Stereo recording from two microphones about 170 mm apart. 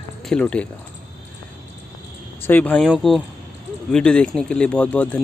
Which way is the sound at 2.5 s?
10° left (ahead or behind).